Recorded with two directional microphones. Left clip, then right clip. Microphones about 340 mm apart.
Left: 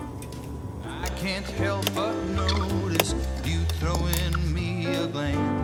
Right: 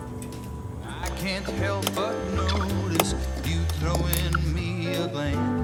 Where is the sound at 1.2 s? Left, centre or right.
Centre.